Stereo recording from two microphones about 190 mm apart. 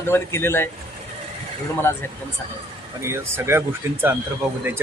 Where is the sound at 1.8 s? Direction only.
10° left (ahead or behind).